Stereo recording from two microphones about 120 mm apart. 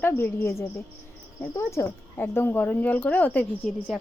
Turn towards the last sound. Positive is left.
turn(degrees=0)  # may be behind; listen again after turning